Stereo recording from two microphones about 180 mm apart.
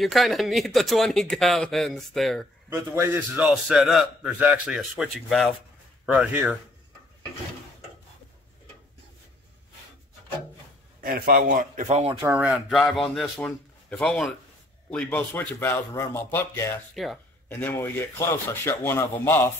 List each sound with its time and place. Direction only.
0.0 s a man's voice: centre (ahead or behind)
2.7 s a man's voice: 10° right (ahead or behind)
11.0 s a man's voice: 55° right (ahead or behind); by 12.2 s 40° right (ahead or behind)
12.4 s a man's voice: centre (ahead or behind); by 16.6 s 15° left (ahead or behind)
16.9 s a man's voice: centre (ahead or behind)
17.5 s speech: 10° left (ahead or behind)